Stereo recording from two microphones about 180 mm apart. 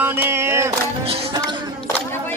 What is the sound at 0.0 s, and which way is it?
Music, 10° right (ahead or behind).